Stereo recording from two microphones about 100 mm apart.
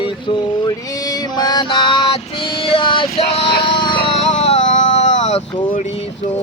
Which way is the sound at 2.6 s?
60° left (ahead or behind).